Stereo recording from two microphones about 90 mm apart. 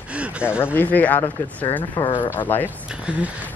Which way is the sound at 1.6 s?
60° left (ahead or behind).